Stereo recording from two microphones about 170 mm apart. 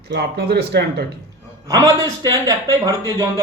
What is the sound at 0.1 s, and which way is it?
Speech, 75° right (ahead or behind).